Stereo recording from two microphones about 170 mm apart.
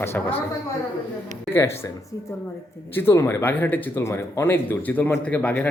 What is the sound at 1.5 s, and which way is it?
Speech, 15° left (ahead or behind).